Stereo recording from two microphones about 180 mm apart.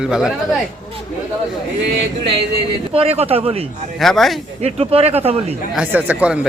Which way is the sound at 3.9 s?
Centre (ahead or behind).